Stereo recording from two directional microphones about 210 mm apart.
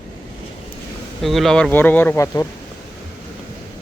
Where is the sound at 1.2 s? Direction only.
Centre (ahead or behind).